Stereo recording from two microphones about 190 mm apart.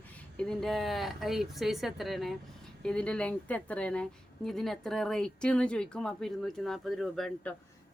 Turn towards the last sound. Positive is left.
turn(degrees=0)  # may be behind; listen again after turning